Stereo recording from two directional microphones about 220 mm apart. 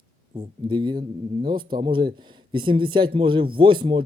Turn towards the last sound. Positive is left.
turn(degrees=-20)  # may be behind; listen again after turning